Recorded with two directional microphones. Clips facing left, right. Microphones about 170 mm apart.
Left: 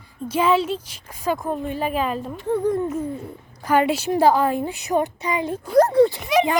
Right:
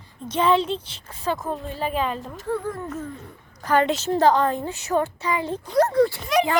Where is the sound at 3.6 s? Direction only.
10° left (ahead or behind).